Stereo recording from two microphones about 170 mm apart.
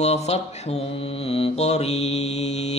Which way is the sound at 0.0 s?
40° left (ahead or behind).